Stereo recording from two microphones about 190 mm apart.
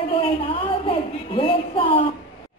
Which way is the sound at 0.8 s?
30° left (ahead or behind).